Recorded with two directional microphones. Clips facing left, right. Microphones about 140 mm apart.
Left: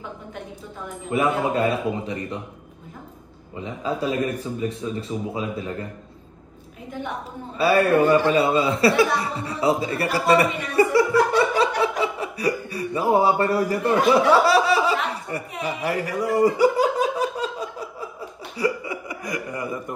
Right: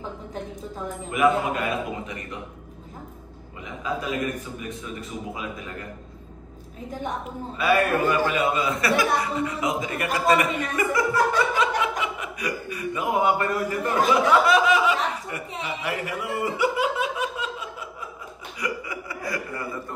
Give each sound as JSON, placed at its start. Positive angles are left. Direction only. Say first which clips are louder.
{"t": 1.1, "sound": "a man's voice", "louder": "even", "side_deg": 35}
{"t": 3.6, "sound": "a man's voice", "louder": "left 4 dB", "side_deg": 30}
{"t": 6.9, "sound": "a woman's voice", "louder": "even", "side_deg": -40}
{"t": 7.5, "sound": "a man's voice", "louder": "left 4 dB", "side_deg": 35}
{"t": 10.3, "sound": "chuckle", "louder": "left 7 dB", "side_deg": 35}
{"t": 14.3, "sound": "a sound", "louder": "left 2 dB", "side_deg": 35}
{"t": 15.6, "sound": "laughter", "louder": "left 5 dB", "side_deg": 40}
{"t": 18.6, "sound": "chuckle", "louder": "left 6 dB", "side_deg": 20}